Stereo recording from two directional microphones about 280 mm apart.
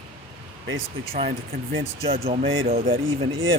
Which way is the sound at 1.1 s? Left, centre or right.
Right.